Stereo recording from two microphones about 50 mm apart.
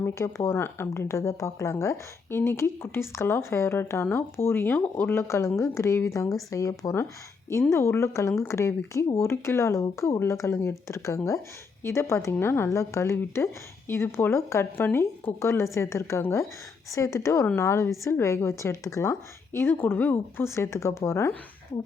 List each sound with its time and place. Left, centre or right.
0.1 s speech: left
1.0 s speech: left
1.8 s speech: left
5.3 s speech: left
7.7 s speech: left
11.8 s speech: left
12.7 s speech: left
16.9 s speech: left
17.5 s speech: left
19.7 s speech: left
20.4 s speech: left